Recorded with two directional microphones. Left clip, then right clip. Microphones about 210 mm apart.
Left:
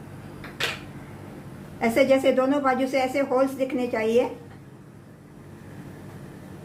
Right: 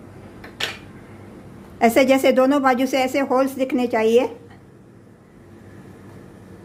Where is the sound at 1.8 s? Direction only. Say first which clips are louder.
Right 5 dB; 50° right (ahead or behind).